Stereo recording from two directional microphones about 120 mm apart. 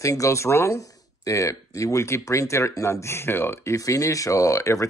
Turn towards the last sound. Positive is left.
turn(degrees=25)  # may be behind; listen again after turning